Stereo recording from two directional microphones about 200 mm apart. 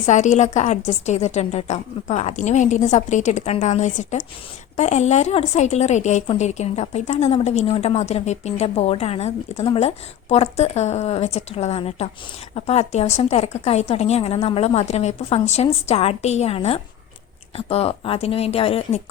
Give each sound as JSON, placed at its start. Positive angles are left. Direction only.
{"t": 0.0, "sound": "a woman's voice", "side_deg": 35}